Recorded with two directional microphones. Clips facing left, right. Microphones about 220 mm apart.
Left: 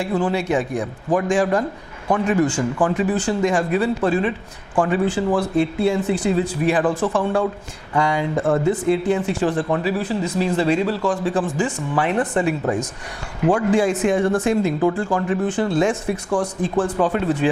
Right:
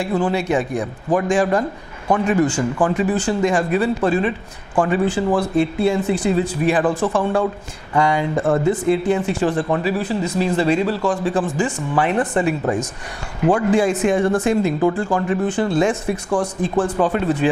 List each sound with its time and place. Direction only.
0.1 s speech: 25° right (ahead or behind)
6.1 s speech: 5° right (ahead or behind)
7.0 s speech: 25° right (ahead or behind)
10.0 s speech: 5° right (ahead or behind)